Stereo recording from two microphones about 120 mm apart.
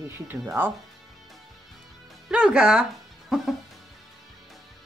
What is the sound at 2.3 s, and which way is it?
Speech, 5° right (ahead or behind).